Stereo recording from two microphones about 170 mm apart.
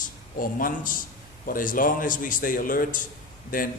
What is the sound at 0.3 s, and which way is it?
A man's voice, 55° left (ahead or behind).